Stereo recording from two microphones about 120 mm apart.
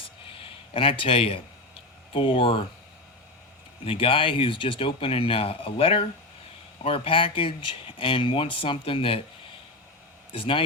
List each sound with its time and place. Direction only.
0.0 s a sound: 50° left (ahead or behind)
2.1 s speech: 45° left (ahead or behind)
3.8 s speech: 50° left (ahead or behind)
10.3 s speech: 45° left (ahead or behind)